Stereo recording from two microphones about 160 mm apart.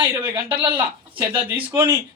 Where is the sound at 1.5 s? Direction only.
15° right (ahead or behind).